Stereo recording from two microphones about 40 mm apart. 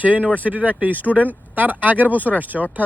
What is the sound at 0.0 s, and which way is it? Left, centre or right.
Speech, right.